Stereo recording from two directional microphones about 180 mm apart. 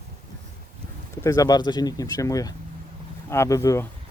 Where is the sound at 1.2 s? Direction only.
20° left (ahead or behind).